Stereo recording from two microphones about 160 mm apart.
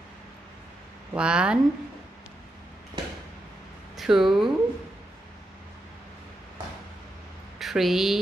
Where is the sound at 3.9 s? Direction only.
Centre (ahead or behind).